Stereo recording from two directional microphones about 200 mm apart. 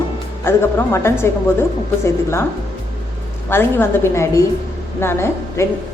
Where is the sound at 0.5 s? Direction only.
10° left (ahead or behind).